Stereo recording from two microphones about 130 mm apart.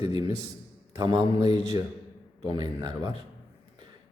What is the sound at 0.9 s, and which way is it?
Speech, 35° right (ahead or behind).